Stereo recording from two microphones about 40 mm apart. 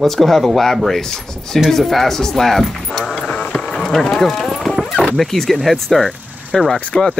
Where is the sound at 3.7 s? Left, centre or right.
Centre.